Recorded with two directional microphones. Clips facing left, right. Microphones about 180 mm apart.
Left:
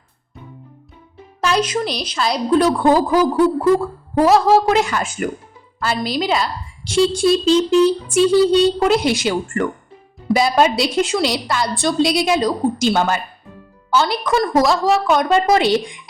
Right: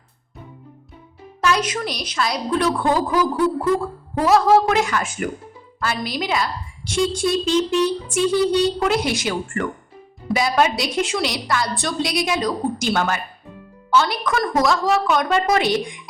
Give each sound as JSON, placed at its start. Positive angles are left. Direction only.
{"t": 1.4, "sound": "a woman's voice", "side_deg": 30}